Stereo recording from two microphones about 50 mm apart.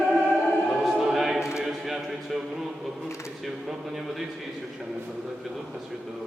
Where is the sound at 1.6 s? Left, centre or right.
Centre.